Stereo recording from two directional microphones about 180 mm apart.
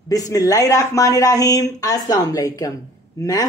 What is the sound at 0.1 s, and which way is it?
A woman's voice, 20° left (ahead or behind).